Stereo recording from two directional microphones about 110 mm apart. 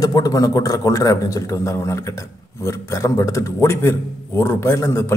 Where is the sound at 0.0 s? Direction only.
35° left (ahead or behind).